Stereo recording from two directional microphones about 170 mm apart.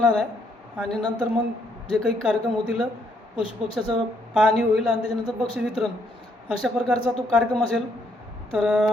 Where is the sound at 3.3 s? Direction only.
35° left (ahead or behind).